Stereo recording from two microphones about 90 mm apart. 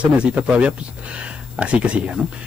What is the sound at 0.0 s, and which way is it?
Speech, 15° right (ahead or behind).